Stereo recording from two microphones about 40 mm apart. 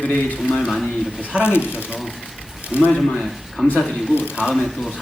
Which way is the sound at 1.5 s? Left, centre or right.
Left.